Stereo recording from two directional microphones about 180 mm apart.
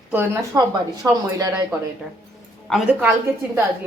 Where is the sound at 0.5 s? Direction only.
20° right (ahead or behind).